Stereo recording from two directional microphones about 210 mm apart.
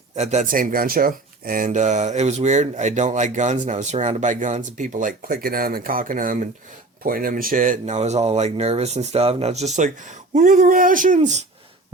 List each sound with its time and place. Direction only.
0.2 s speech: 35° right (ahead or behind)